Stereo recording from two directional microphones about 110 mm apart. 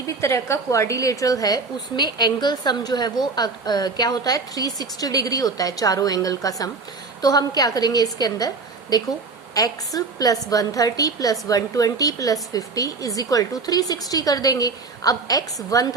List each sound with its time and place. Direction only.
0.2 s a woman's voice: 25° left (ahead or behind)